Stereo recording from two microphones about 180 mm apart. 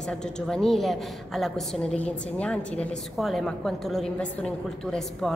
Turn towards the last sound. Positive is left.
turn(degrees=5)  # may be behind; listen again after turning